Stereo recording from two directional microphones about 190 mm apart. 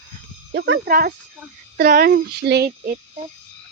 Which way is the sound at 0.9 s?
50° right (ahead or behind).